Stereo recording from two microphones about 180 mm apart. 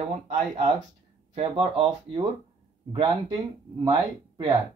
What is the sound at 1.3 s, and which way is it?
Speech, 30° right (ahead or behind).